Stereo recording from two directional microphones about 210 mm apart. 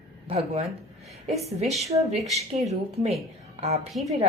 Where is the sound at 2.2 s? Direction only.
Centre (ahead or behind).